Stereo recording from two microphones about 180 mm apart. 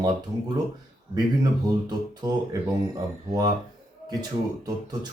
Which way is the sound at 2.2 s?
20° right (ahead or behind).